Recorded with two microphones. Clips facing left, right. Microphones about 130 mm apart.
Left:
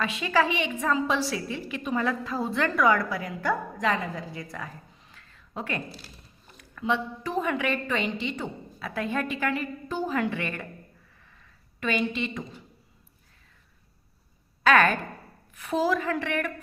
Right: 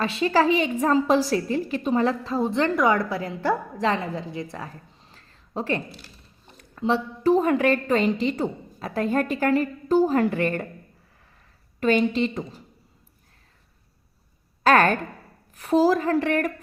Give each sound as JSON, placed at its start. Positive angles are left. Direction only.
{"t": 0.0, "sound": "a woman's voice", "side_deg": -35}
{"t": 14.6, "sound": "a woman's voice", "side_deg": -40}